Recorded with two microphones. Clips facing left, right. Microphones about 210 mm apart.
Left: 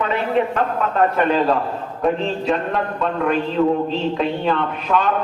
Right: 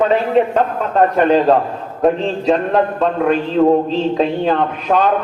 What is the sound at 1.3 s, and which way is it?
A man's voice, 40° right (ahead or behind).